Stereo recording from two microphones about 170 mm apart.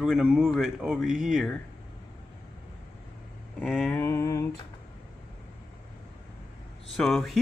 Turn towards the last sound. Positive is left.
turn(degrees=5)  # may be behind; listen again after turning